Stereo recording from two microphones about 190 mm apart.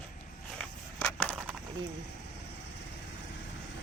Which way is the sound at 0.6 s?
5° left (ahead or behind).